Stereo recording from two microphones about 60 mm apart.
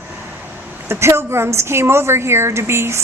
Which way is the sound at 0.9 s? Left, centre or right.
Right.